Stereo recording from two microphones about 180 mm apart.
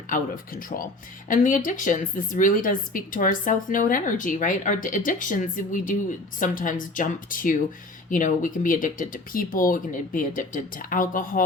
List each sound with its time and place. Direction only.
0.1 s a woman's voice: 50° left (ahead or behind)